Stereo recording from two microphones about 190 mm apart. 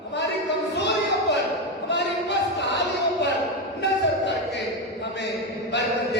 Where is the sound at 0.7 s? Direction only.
65° left (ahead or behind).